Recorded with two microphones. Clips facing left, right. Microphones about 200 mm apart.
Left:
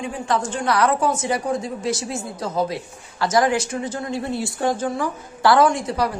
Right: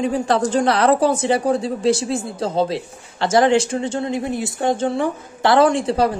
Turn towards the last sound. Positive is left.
turn(degrees=-30)  # may be behind; listen again after turning